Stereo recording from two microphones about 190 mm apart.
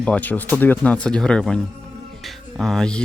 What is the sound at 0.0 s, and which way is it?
Speech, 5° left (ahead or behind).